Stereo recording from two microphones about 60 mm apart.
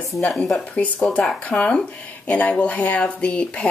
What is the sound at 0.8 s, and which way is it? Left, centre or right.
Speech, left.